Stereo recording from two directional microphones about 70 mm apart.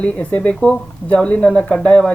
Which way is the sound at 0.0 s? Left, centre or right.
Centre.